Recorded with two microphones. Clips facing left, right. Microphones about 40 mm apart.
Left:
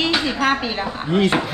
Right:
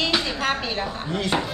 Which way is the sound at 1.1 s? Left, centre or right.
Left.